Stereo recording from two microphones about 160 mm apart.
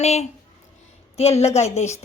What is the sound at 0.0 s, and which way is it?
Speech, 45° left (ahead or behind).